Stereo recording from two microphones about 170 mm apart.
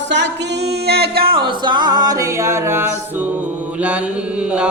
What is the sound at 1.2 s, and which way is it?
Music, 30° right (ahead or behind).